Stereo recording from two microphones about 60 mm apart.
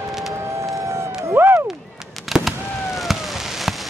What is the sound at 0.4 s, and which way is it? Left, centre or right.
Music, right.